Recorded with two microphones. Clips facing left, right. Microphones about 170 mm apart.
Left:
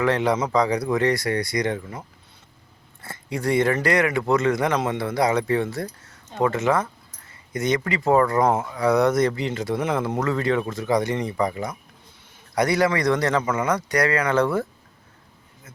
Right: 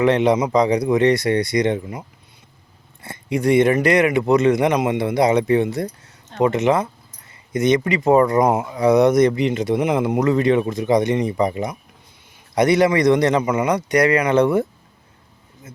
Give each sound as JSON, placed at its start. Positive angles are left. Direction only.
{"t": 0.0, "sound": "speech", "side_deg": -20}